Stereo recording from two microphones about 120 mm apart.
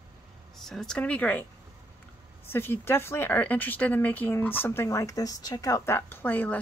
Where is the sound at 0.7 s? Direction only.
5° left (ahead or behind).